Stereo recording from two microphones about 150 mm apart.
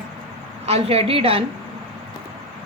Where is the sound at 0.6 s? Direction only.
40° right (ahead or behind).